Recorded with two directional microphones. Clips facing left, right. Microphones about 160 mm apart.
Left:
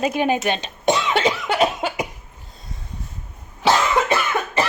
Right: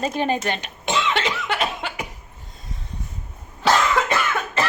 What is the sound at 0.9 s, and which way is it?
Cough, 40° left (ahead or behind).